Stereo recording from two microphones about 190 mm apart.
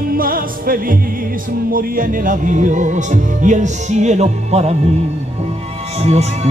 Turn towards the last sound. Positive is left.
turn(degrees=-35)  # may be behind; listen again after turning